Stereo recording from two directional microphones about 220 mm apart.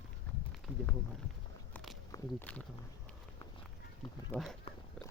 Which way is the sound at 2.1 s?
5° left (ahead or behind).